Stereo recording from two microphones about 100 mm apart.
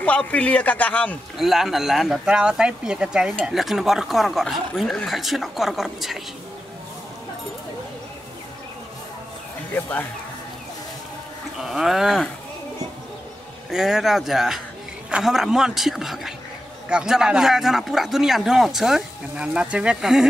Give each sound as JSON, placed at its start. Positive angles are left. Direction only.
{"t": 0.0, "sound": "a man's voice", "side_deg": 15}
{"t": 1.4, "sound": "speech", "side_deg": -5}
{"t": 9.8, "sound": "a man's voice", "side_deg": 15}
{"t": 11.5, "sound": "speech", "side_deg": -5}
{"t": 13.7, "sound": "speech", "side_deg": -5}